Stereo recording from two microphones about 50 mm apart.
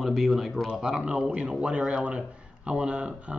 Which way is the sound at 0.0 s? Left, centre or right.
Centre.